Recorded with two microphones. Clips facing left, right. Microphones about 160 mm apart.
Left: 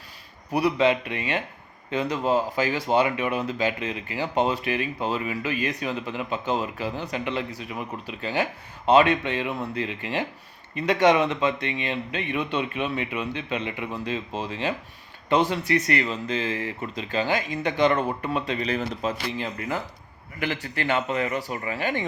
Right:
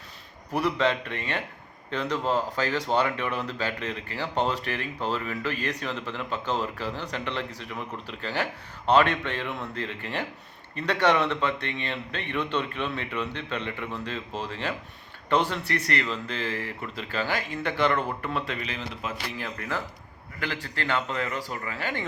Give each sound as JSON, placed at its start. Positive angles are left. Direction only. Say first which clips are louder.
{"t": 0.5, "sound": "speech", "louder": "left 4 dB", "side_deg": 15}
{"t": 18.6, "sound": "speech", "louder": "left 8 dB", "side_deg": 40}
{"t": 19.4, "sound": "speech", "louder": "left 3 dB", "side_deg": 20}